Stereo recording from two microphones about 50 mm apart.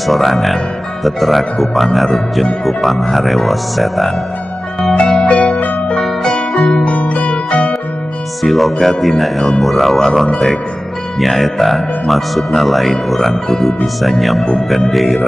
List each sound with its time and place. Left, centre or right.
0.0 s speech: centre
4.9 s music: centre
8.5 s speech: centre